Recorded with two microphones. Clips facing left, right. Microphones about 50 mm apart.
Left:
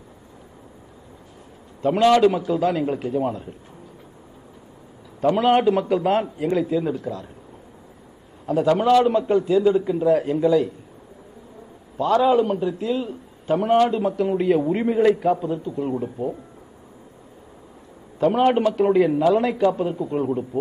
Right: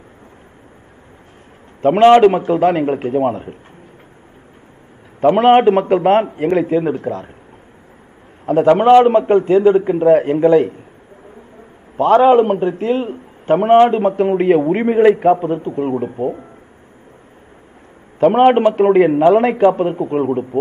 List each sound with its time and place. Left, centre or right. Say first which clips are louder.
1.8 s a man's voice: right 8 dB; right
5.2 s a man's voice: right 7 dB; right
8.5 s a man's voice: right 8 dB; right
12.0 s a man's voice: right 8 dB; right
18.2 s a man's voice: right 7 dB; right